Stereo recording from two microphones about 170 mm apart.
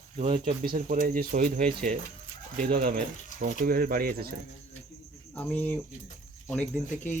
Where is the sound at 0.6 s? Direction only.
60° right (ahead or behind).